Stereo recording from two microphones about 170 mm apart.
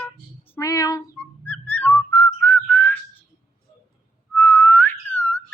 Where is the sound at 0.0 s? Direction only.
10° left (ahead or behind).